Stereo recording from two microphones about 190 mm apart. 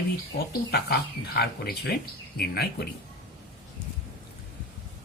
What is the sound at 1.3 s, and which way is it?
Speech, 55° left (ahead or behind).